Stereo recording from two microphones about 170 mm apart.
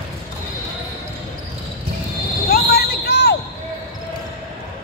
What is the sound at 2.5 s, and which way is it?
Basketball bounce, 65° left (ahead or behind).